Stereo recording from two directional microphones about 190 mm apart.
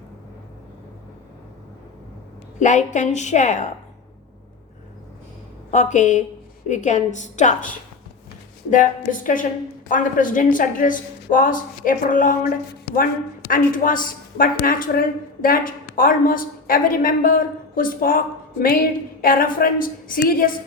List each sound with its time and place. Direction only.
2.6 s a woman's voice: 40° left (ahead or behind)
5.7 s a woman's voice: 40° left (ahead or behind)
8.7 s speech: 45° left (ahead or behind)